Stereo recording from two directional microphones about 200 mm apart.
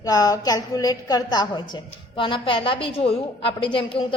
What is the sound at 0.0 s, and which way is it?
A woman's voice, 20° left (ahead or behind).